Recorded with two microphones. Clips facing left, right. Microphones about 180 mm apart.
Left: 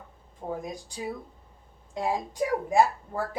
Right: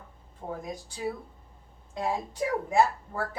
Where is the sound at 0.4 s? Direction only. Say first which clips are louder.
Left 3 dB; 15° left (ahead or behind).